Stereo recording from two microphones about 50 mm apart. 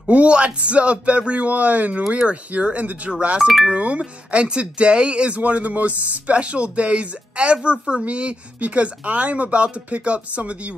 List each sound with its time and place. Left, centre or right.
0.1 s speech: right